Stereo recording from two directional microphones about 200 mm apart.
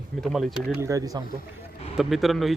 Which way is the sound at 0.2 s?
Centre (ahead or behind).